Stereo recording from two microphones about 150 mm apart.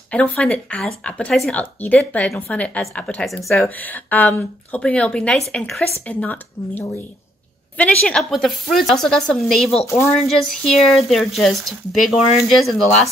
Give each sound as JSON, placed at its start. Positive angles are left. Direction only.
{"t": 0.1, "sound": "speech", "side_deg": 10}
{"t": 3.6, "sound": "speech", "side_deg": 10}
{"t": 9.8, "sound": "speech", "side_deg": 20}
{"t": 10.6, "sound": "speech", "side_deg": 0}